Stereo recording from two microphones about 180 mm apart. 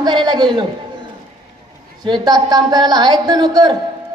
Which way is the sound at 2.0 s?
25° right (ahead or behind).